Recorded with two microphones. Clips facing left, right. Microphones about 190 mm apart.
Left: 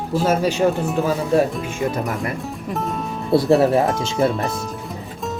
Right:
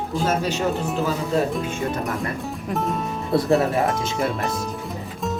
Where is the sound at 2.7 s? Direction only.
Centre (ahead or behind).